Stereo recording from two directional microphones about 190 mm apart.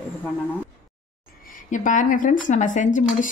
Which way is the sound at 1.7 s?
40° left (ahead or behind).